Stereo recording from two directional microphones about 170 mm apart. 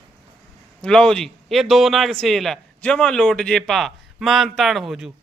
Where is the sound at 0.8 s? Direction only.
5° left (ahead or behind).